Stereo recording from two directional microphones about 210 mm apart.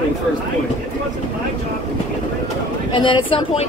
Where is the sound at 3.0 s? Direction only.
25° left (ahead or behind).